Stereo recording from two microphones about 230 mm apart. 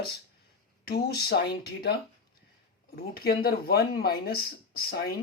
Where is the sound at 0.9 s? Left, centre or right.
Left.